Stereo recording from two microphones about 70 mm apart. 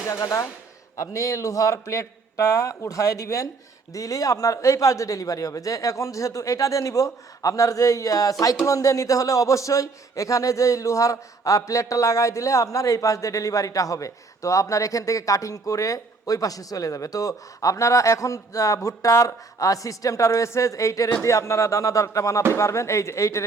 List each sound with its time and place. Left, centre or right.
0.1 s a man's voice: left